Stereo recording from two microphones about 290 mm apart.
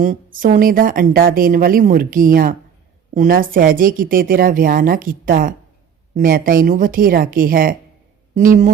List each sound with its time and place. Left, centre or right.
0.0 s a woman's voice: right